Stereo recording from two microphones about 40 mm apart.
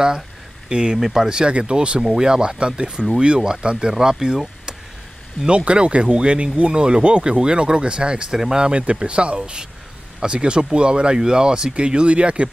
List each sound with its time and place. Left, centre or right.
0.7 s speech: right
0.9 s speech: centre
1.4 s speech: right
5.7 s speech: right
8.3 s speech: centre
8.6 s speech: right